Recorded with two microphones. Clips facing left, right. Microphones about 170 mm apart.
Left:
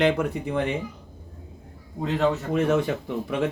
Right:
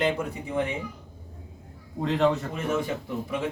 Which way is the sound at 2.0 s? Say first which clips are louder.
Even; centre (ahead or behind).